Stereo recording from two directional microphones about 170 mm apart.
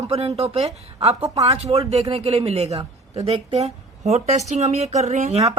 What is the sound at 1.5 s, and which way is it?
Speech, 35° right (ahead or behind).